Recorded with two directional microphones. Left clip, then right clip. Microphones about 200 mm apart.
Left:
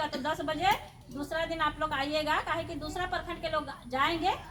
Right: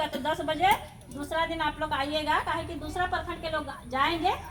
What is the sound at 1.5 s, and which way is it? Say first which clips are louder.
Speech: right 1 dB; 25° left (ahead or behind).